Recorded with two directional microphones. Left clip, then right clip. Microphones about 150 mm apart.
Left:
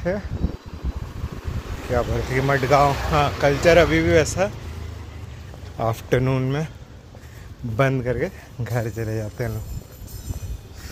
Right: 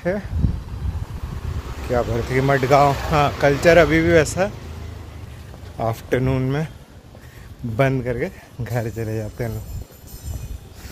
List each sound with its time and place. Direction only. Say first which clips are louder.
1.9 s speech: right 2 dB; 45° right (ahead or behind)
5.8 s speech: even; 10° right (ahead or behind)
7.7 s a man's voice: right 1 dB; 20° right (ahead or behind)
8.1 s a man's voice: even; 10° right (ahead or behind)
8.7 s a man's voice: right 1 dB; 25° right (ahead or behind)